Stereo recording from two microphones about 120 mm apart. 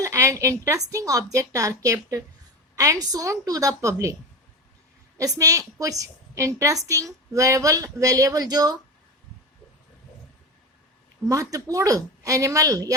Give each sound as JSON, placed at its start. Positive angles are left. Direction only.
{"t": 0.0, "sound": "a woman's voice", "side_deg": -25}
{"t": 5.1, "sound": "a woman's voice", "side_deg": -30}
{"t": 11.3, "sound": "a woman's voice", "side_deg": -30}